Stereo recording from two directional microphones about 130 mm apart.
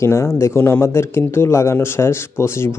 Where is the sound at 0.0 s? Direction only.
20° left (ahead or behind).